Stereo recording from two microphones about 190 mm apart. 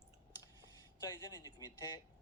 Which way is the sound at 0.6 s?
20° left (ahead or behind).